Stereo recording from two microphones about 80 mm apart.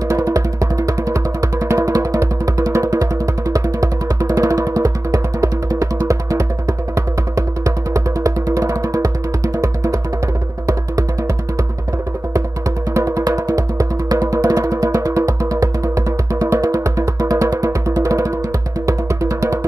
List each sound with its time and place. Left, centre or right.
0.1 s music: right
12.9 s music: right